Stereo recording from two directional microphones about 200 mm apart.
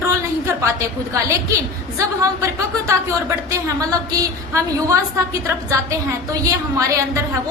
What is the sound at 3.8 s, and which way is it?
A woman's voice, 15° right (ahead or behind).